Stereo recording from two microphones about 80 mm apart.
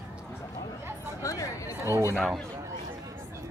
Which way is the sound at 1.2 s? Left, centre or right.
Left.